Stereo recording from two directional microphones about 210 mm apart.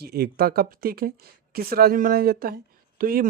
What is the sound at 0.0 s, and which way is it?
Speech, 50° right (ahead or behind).